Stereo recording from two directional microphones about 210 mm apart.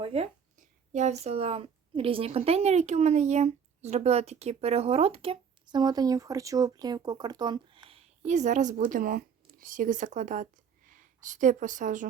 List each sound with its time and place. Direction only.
0.0 s a woman's voice: 30° right (ahead or behind)